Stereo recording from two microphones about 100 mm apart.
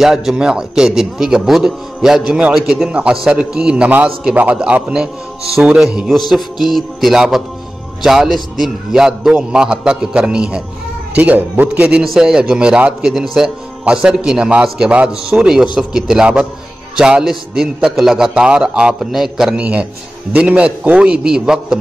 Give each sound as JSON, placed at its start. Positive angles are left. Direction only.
{"t": 0.0, "sound": "a man's voice", "side_deg": -5}
{"t": 12.0, "sound": "a man's voice", "side_deg": -5}